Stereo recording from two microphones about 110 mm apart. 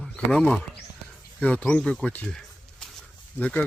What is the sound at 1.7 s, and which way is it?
Speech, 10° left (ahead or behind).